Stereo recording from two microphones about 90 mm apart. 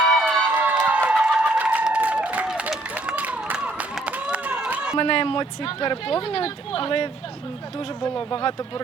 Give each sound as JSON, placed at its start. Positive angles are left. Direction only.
{"t": 0.3, "sound": "a sound", "side_deg": -15}
{"t": 4.9, "sound": "speech", "side_deg": 85}
{"t": 8.0, "sound": "speech", "side_deg": 65}